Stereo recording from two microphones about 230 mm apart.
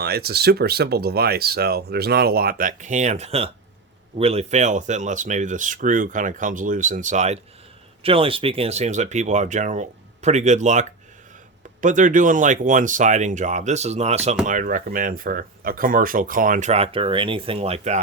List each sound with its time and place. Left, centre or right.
0.0 s speech: right